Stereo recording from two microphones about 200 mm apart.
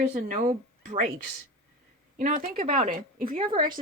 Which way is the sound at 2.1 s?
45° right (ahead or behind).